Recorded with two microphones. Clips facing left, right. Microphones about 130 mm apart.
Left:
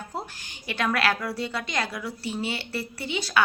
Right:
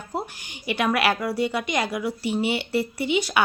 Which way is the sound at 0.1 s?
15° right (ahead or behind).